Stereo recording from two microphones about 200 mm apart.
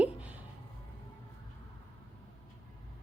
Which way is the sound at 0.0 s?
5° right (ahead or behind).